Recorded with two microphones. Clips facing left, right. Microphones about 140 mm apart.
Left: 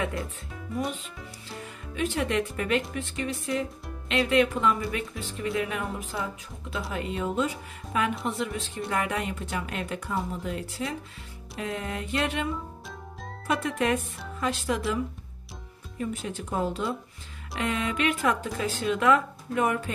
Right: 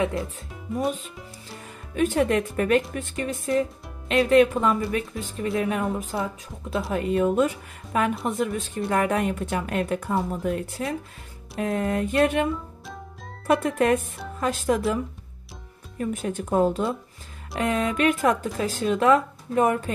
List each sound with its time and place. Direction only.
0.7 s speech: 45° right (ahead or behind)
13.5 s speech: 50° right (ahead or behind)
16.0 s speech: 50° right (ahead or behind)